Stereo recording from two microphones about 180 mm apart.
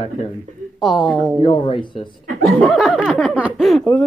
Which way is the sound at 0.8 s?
Centre (ahead or behind).